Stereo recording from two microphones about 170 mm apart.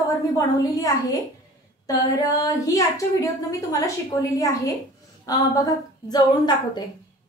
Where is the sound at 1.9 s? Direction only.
20° left (ahead or behind).